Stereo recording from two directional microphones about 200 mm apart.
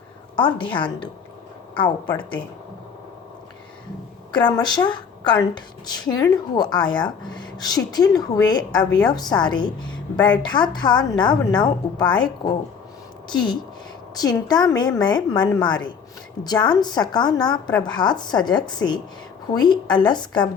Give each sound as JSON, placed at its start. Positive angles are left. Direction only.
{"t": 0.3, "sound": "a woman's voice", "side_deg": 25}
{"t": 4.3, "sound": "a woman's voice", "side_deg": 25}